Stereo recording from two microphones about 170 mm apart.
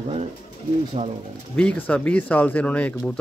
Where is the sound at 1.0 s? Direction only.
40° right (ahead or behind).